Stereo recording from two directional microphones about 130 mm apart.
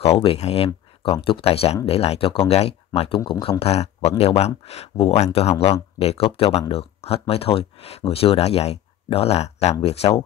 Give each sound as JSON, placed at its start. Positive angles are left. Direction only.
{"t": 0.0, "sound": "speech", "side_deg": 45}